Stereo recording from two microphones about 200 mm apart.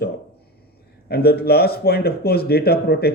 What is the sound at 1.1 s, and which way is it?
Speech, 50° left (ahead or behind).